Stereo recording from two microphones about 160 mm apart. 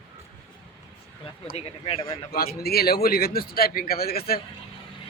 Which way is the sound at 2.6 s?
75° left (ahead or behind).